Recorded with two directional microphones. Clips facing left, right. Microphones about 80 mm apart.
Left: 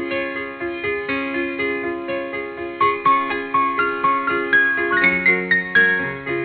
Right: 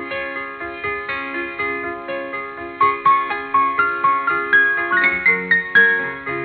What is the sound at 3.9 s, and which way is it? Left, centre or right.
Music, right.